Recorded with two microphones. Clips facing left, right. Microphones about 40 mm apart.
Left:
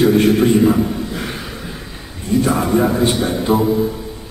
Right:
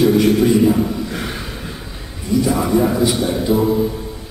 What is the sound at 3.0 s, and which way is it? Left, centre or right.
Speech, left.